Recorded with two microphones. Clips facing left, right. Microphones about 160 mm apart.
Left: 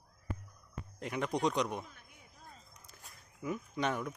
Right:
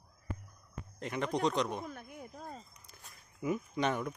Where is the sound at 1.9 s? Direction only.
50° right (ahead or behind).